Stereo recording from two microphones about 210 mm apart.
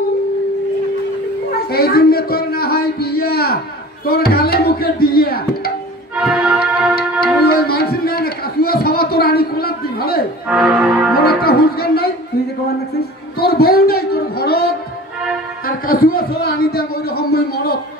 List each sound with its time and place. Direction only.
1.7 s a man's voice: 45° left (ahead or behind)
6.1 s music: 5° right (ahead or behind)
7.4 s speech: 45° left (ahead or behind)
10.5 s music: 5° right (ahead or behind)
11.1 s a man's voice: 45° left (ahead or behind)
13.4 s a man's voice: 45° left (ahead or behind)